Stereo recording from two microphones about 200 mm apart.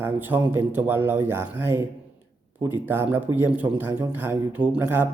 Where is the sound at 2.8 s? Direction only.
10° right (ahead or behind).